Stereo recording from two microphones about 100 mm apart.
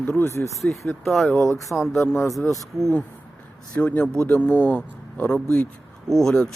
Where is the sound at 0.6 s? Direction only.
5° left (ahead or behind).